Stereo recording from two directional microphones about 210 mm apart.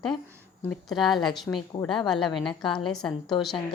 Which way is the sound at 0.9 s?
Centre (ahead or behind).